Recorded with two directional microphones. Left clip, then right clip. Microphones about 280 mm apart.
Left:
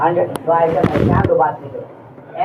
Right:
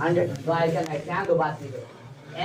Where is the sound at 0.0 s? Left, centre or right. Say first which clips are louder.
Left 8 dB; right.